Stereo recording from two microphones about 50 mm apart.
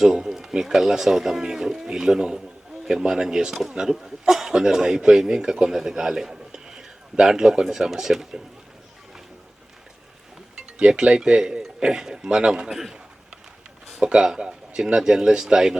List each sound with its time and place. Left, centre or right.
0.0 s speech: centre
10.8 s speech: centre
14.2 s speech: centre